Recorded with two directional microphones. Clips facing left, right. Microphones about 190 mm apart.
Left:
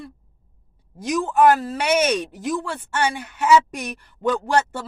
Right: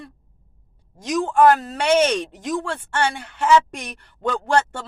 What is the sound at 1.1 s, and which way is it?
A woman's voice, 5° left (ahead or behind).